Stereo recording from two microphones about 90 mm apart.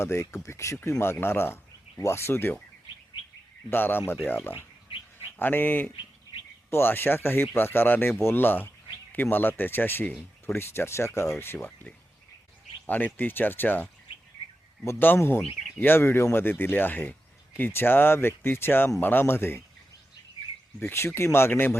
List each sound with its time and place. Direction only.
0.0 s speech: 30° left (ahead or behind)
3.7 s speech: 25° left (ahead or behind)
13.1 s speech: 20° left (ahead or behind)
20.7 s speech: 25° left (ahead or behind)